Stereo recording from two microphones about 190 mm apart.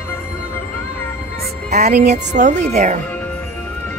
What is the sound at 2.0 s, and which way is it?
A woman's voice, 40° right (ahead or behind).